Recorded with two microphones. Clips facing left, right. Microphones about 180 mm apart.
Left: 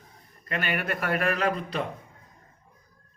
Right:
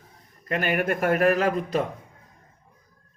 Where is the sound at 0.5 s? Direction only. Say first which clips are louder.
Right 5 dB; 45° right (ahead or behind).